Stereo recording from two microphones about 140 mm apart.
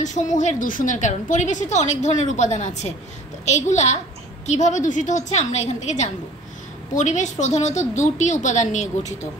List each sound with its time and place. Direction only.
0.0 s a woman's voice: 60° left (ahead or behind)